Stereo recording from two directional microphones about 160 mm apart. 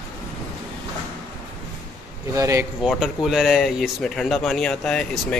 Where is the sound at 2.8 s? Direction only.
Centre (ahead or behind).